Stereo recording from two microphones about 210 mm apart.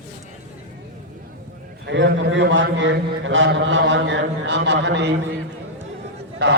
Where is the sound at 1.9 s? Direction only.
60° right (ahead or behind).